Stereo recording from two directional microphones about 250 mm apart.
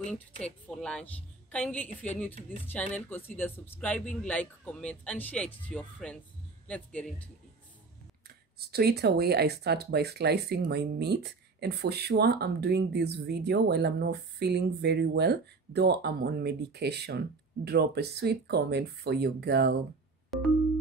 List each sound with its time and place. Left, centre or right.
0.7 s speech: centre
8.5 s speech: right
20.3 s music: centre